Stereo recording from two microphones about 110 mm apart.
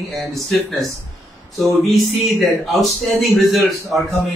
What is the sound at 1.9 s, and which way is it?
A man's voice, centre (ahead or behind).